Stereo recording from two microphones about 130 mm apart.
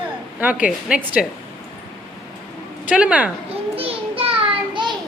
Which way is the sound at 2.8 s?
10° right (ahead or behind).